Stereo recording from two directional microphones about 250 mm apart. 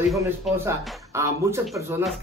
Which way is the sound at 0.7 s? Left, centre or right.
Centre.